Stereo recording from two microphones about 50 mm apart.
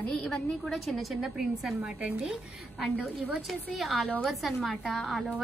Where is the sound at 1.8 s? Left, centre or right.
Right.